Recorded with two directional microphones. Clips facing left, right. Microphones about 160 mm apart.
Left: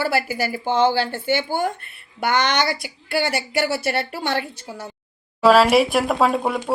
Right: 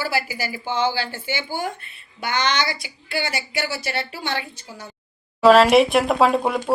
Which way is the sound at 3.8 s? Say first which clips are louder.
Left 4 dB; 60° left (ahead or behind).